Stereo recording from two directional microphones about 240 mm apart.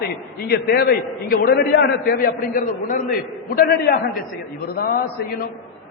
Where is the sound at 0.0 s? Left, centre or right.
Left.